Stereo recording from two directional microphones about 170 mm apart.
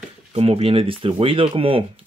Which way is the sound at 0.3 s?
35° right (ahead or behind).